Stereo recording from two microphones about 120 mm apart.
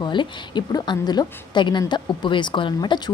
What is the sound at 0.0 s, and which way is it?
A woman's voice, 40° left (ahead or behind).